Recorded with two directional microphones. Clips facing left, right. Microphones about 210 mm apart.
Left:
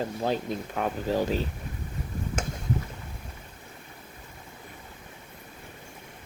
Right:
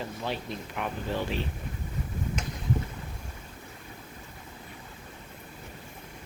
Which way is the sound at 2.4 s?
50° left (ahead or behind).